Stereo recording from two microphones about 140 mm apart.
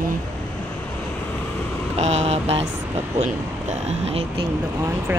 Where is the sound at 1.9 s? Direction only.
50° right (ahead or behind).